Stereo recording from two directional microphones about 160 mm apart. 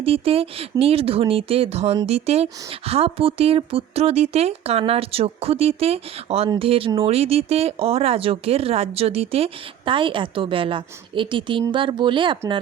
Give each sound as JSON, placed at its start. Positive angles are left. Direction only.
{"t": 0.0, "sound": "speech", "side_deg": -35}